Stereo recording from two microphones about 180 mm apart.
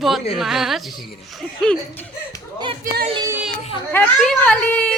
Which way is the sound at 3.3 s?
10° right (ahead or behind).